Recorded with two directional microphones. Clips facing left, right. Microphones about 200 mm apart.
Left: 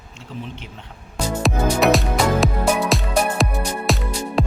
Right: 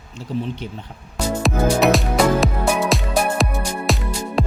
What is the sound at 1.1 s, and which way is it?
Music, centre (ahead or behind).